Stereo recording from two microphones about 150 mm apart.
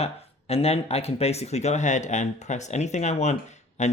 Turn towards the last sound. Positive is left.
turn(degrees=50)  # may be behind; listen again after turning